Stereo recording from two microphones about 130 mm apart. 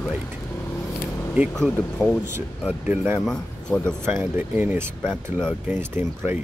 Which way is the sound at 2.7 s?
15° right (ahead or behind).